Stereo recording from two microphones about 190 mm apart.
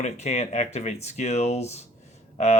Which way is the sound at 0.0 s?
35° left (ahead or behind).